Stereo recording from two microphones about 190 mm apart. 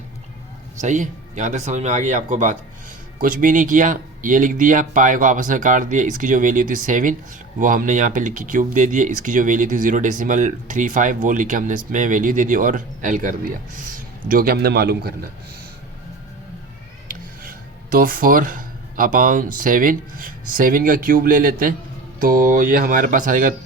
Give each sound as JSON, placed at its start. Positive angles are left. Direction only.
{"t": 0.8, "sound": "speech", "side_deg": -40}
{"t": 17.9, "sound": "speech", "side_deg": -45}